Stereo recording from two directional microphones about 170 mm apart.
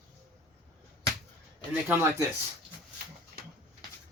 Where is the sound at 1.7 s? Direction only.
10° right (ahead or behind).